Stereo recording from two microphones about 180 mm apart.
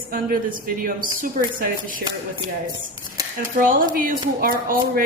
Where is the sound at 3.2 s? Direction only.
20° right (ahead or behind).